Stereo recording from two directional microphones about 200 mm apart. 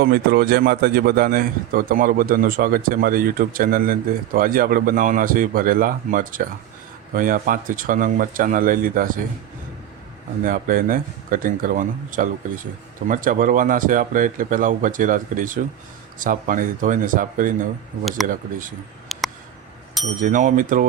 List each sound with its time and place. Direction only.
0.0 s a man's voice: 50° right (ahead or behind)
10.4 s a man's voice: 45° right (ahead or behind)
19.1 s a sound: centre (ahead or behind)
20.2 s speech: 40° right (ahead or behind)